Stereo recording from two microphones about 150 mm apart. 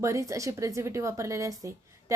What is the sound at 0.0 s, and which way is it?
Speech, 20° right (ahead or behind).